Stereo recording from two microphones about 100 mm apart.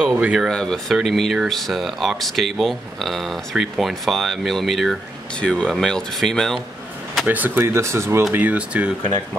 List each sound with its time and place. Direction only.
0.1 s speech: 10° right (ahead or behind)
7.2 s speech: 20° right (ahead or behind)